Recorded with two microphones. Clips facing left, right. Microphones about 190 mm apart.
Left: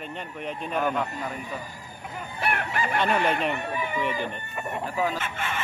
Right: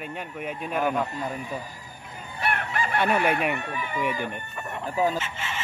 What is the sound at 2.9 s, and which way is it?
Speech, 10° right (ahead or behind).